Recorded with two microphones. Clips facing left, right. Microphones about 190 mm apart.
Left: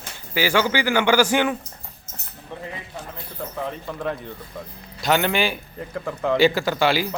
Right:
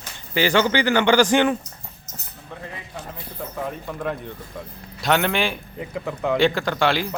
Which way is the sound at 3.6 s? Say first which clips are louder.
Even; 5° right (ahead or behind).